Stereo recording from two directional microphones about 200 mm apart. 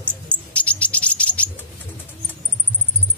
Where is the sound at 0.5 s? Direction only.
5° left (ahead or behind).